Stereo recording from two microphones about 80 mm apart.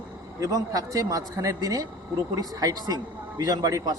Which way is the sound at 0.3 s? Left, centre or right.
Right.